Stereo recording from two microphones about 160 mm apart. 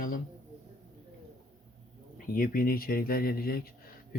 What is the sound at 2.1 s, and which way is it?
Speech, 60° left (ahead or behind).